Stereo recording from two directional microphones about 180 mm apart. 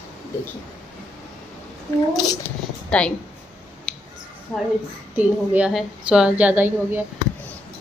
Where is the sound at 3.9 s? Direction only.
Centre (ahead or behind).